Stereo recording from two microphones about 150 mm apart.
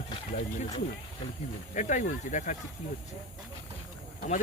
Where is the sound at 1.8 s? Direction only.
55° left (ahead or behind).